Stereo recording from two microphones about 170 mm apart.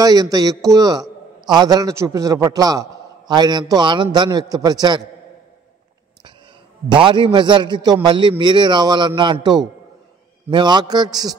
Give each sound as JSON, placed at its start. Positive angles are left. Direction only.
{"t": 0.0, "sound": "a man's voice", "side_deg": -20}
{"t": 6.9, "sound": "a man's voice", "side_deg": -30}